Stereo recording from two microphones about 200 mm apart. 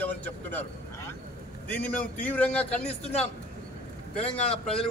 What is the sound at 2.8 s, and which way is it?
Speech, 30° left (ahead or behind).